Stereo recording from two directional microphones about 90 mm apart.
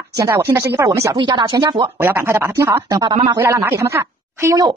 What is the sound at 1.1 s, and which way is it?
Speech, 55° right (ahead or behind).